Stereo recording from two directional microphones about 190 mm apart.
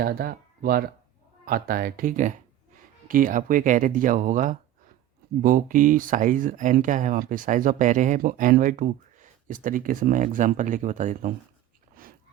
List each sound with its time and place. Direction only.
0.0 s speech: 50° right (ahead or behind)